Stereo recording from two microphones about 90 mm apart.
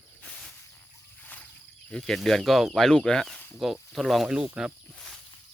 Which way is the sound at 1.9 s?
5° left (ahead or behind).